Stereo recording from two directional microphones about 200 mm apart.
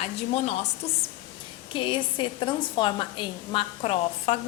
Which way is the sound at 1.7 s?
25° left (ahead or behind).